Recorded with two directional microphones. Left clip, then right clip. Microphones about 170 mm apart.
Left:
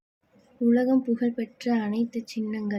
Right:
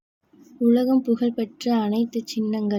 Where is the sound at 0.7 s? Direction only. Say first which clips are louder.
Right 3 dB; 25° right (ahead or behind).